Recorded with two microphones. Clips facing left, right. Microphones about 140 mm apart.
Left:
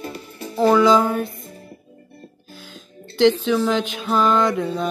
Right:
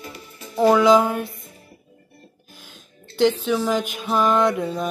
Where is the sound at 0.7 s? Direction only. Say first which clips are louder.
Even; 5° right (ahead or behind).